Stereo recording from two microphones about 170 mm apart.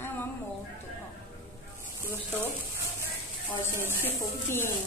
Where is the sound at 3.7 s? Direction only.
15° right (ahead or behind).